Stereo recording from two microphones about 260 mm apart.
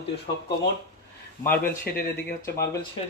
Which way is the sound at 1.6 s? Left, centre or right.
Left.